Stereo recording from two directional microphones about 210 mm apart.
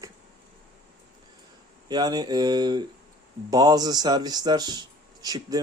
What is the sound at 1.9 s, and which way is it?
Speech, 20° right (ahead or behind).